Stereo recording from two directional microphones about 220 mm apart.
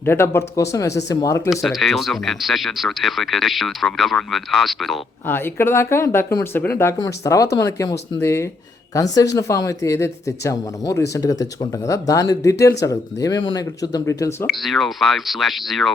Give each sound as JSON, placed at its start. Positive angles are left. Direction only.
{"t": 0.0, "sound": "speech", "side_deg": 10}
{"t": 1.5, "sound": "speech", "side_deg": 0}
{"t": 5.5, "sound": "speech", "side_deg": 10}
{"t": 14.4, "sound": "speech", "side_deg": 0}